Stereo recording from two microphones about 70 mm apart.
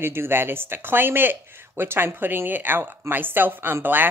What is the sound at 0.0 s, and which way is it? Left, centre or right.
Speech, right.